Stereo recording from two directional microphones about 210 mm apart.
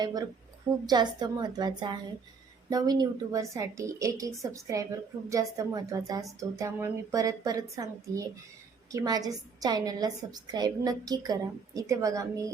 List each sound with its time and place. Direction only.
0.0 s a woman's voice: 15° right (ahead or behind)